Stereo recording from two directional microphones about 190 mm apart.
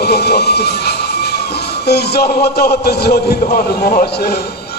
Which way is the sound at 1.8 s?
60° left (ahead or behind).